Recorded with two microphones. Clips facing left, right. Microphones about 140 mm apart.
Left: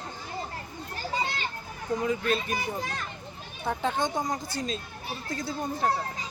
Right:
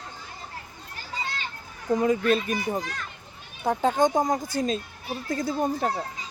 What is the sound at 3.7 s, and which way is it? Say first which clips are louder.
Speech: right 6 dB; 45° right (ahead or behind).